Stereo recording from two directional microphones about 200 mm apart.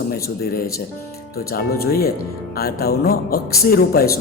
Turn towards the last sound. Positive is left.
turn(degrees=50)  # may be behind; listen again after turning